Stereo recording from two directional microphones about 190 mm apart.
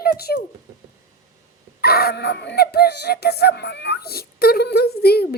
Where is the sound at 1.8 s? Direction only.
55° left (ahead or behind).